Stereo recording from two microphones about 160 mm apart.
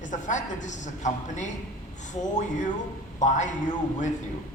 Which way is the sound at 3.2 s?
50° left (ahead or behind).